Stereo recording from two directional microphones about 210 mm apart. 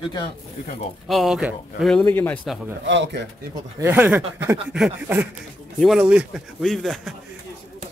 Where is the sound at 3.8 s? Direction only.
10° right (ahead or behind).